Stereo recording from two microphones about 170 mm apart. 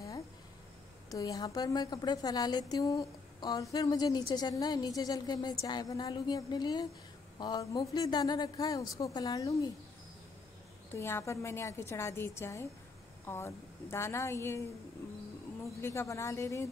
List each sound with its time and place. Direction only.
1.1 s a woman's voice: 20° left (ahead or behind)
10.9 s a woman's voice: 15° left (ahead or behind)
15.8 s a woman's voice: 15° left (ahead or behind)